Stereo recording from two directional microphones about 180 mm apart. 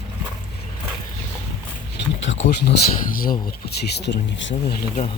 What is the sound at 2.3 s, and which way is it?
Speech, 70° left (ahead or behind).